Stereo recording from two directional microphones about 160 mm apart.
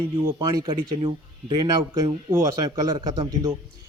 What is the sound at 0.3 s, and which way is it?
Speech, 25° right (ahead or behind).